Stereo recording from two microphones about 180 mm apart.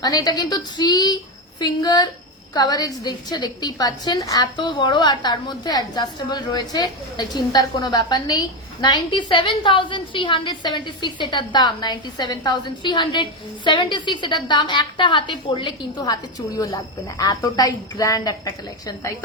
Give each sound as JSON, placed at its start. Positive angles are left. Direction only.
{"t": 0.0, "sound": "a woman's voice", "side_deg": 20}